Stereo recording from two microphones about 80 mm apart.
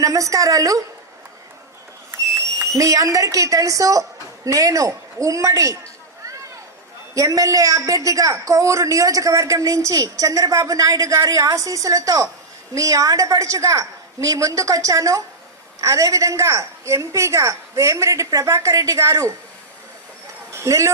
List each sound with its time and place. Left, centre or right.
0.0 s a woman's voice: right
2.7 s a woman's voice: right
7.1 s a woman's voice: right
20.5 s a man's voice: right